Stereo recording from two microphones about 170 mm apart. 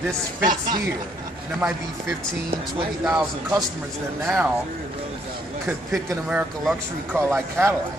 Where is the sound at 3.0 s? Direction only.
5° right (ahead or behind).